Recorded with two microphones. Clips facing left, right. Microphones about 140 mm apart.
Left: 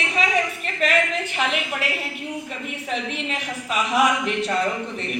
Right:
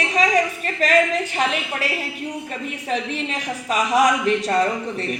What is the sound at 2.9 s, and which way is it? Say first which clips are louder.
A woman's voice: right 3 dB; 40° right (ahead or behind).